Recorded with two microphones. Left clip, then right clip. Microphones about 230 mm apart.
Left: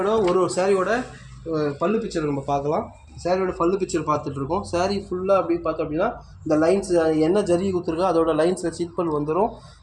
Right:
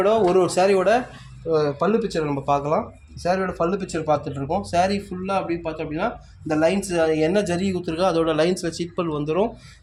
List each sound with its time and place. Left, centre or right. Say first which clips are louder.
0.0 s speech: right 2 dB; right